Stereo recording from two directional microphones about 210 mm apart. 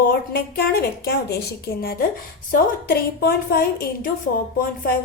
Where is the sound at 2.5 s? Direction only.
45° left (ahead or behind).